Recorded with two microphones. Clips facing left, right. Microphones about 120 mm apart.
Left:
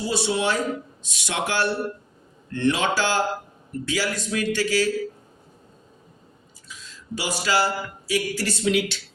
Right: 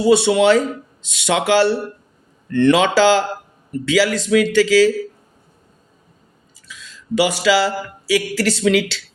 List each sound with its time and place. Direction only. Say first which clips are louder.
0.0 s a man's voice: right 11 dB; 80° right
2.5 s a man's voice: right 8 dB; 70° right (ahead or behind); by 4.9 s 90° right
6.7 s speech: right 9 dB; 75° right (ahead or behind)